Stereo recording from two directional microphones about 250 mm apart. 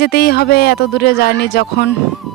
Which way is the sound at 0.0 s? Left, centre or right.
Left.